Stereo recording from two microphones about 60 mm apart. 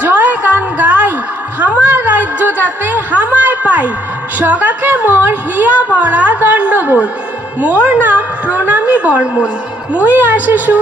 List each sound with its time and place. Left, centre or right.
0.0 s a sound: right
1.5 s a woman's voice: right
9.9 s a woman's voice: right